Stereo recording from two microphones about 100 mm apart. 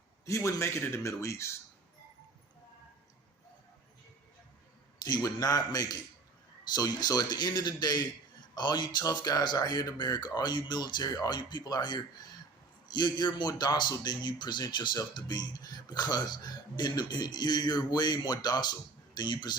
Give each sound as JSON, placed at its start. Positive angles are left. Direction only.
{"t": 0.3, "sound": "speech", "side_deg": 30}
{"t": 5.0, "sound": "a man's voice", "side_deg": 40}